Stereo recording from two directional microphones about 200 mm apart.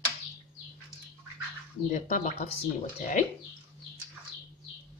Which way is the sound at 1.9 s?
40° left (ahead or behind).